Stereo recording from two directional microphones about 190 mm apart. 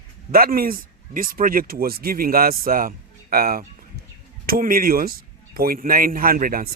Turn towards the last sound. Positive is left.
turn(degrees=-50)  # may be behind; listen again after turning